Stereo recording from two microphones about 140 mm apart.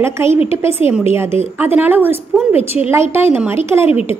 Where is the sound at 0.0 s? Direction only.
20° right (ahead or behind).